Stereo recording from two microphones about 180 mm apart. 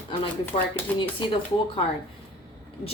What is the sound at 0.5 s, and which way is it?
Speech, 30° left (ahead or behind).